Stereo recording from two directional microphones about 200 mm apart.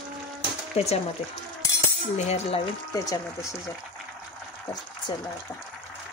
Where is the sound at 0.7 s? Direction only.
30° left (ahead or behind).